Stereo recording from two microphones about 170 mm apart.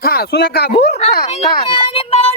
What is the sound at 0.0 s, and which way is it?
Speech, 65° left (ahead or behind).